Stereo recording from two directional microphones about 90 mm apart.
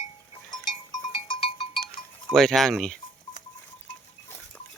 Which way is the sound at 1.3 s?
90° left.